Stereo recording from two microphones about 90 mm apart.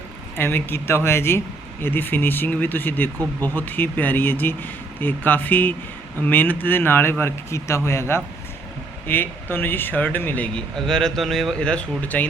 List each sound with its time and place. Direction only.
0.3 s speech: 25° left (ahead or behind)
10.8 s speech: 5° left (ahead or behind)